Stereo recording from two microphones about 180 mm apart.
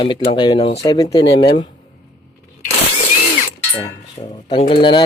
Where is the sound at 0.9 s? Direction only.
20° left (ahead or behind).